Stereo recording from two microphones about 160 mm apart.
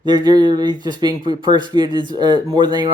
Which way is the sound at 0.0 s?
25° right (ahead or behind).